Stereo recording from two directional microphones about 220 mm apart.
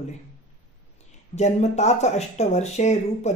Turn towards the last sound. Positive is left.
turn(degrees=30)  # may be behind; listen again after turning